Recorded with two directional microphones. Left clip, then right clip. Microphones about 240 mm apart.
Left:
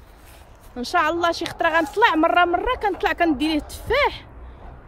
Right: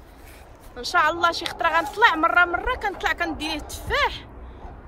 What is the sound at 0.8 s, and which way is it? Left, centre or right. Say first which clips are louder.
Speech: even; left.